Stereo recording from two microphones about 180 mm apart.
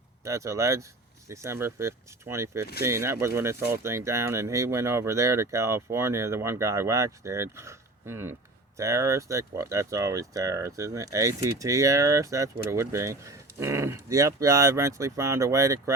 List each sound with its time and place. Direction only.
0.3 s speech: 15° right (ahead or behind)